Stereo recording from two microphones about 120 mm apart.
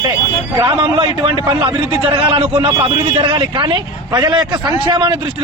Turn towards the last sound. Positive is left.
turn(degrees=-40)  # may be behind; listen again after turning